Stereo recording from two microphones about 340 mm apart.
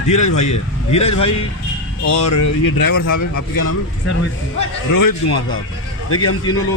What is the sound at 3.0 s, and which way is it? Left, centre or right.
Speech, left.